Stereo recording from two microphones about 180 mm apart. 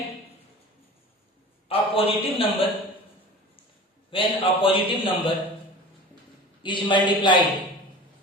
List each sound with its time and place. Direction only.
1.6 s a man's voice: 30° left (ahead or behind)
4.1 s a man's voice: 30° left (ahead or behind)
6.6 s a man's voice: 25° left (ahead or behind)